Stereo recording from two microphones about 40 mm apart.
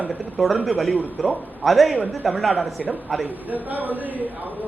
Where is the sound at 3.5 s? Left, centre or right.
Right.